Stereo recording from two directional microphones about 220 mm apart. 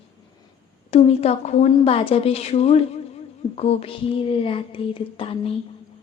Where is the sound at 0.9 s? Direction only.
30° left (ahead or behind).